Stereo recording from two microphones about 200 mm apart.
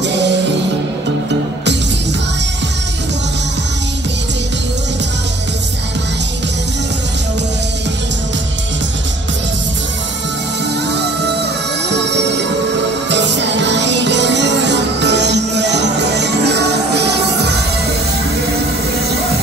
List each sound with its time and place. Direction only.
0.0 s music: 60° right (ahead or behind)
13.1 s music: 60° right (ahead or behind)